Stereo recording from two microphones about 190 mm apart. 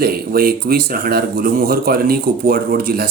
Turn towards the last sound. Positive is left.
turn(degrees=-50)  # may be behind; listen again after turning